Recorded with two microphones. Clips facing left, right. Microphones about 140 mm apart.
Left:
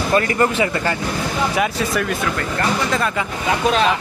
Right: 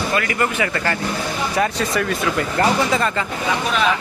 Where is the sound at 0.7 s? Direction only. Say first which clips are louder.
Left 1 dB; 15° left (ahead or behind).